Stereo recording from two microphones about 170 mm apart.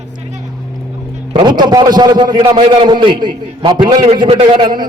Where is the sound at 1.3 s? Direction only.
25° right (ahead or behind).